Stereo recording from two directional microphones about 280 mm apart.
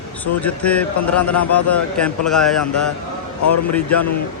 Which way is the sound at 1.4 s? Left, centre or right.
Left.